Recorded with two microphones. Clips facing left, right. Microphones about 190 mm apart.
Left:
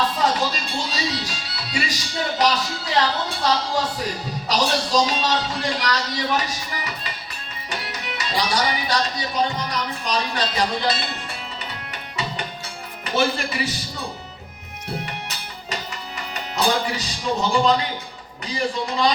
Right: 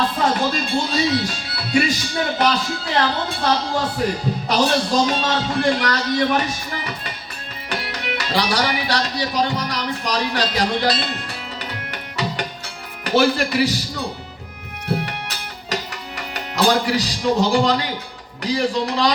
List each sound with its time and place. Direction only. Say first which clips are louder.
0.5 s a man's voice: right 7 dB; 50° right (ahead or behind)
7.7 s music: right 5 dB; 65° right (ahead or behind)
13.1 s speech: right 5 dB; 70° right (ahead or behind)
15.7 s music: right 4 dB; 70° right (ahead or behind)
18.4 s speech: right 5 dB; 70° right (ahead or behind)